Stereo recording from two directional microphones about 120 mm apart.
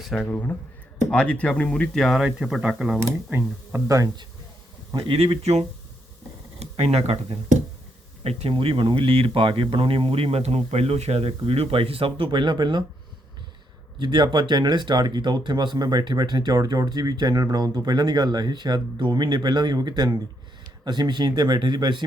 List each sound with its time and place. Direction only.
0.2 s speech: 15° left (ahead or behind); by 3.0 s 5° right (ahead or behind)
3.2 s speech: 20° right (ahead or behind)
4.9 s speech: 50° right (ahead or behind)
14.0 s speech: 40° right (ahead or behind)